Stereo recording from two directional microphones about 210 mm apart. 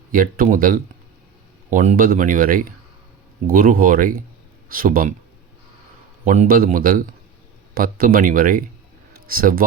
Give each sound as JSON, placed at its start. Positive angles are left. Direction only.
{"t": 0.1, "sound": "speech", "side_deg": -40}
{"t": 6.2, "sound": "speech", "side_deg": -35}